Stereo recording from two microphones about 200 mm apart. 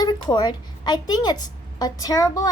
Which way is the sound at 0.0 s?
20° left (ahead or behind).